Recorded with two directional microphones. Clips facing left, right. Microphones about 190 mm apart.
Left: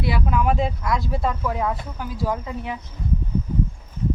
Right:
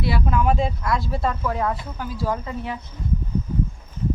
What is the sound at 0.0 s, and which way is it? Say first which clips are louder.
Speech: even; 10° left (ahead or behind).